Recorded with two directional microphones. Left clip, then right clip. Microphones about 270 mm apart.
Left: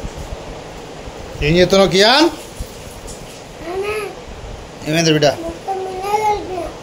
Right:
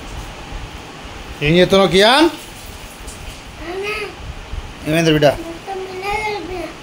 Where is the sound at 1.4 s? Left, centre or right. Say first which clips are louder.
Even; right.